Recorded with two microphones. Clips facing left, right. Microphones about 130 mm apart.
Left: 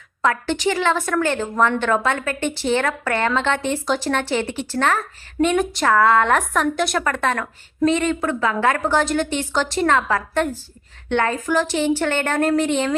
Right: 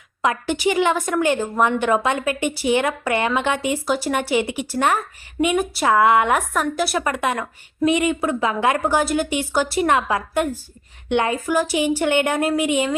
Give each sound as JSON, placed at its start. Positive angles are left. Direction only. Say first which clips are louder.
{"t": 0.2, "sound": "a woman's voice", "louder": "even", "side_deg": -15}